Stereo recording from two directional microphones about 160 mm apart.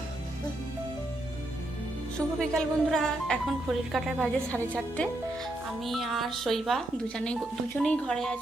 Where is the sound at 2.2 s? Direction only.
5° left (ahead or behind).